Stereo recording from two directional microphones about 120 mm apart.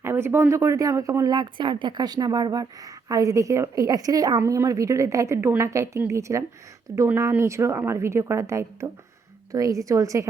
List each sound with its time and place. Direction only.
0.0 s speech: 20° right (ahead or behind)